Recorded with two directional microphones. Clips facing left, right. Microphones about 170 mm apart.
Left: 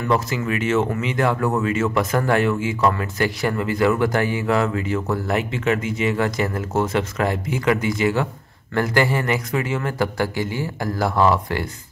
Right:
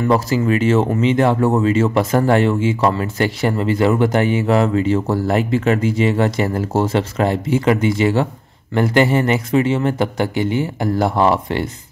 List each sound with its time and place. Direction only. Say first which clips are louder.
0.1 s speech: right 4 dB; 35° right (ahead or behind)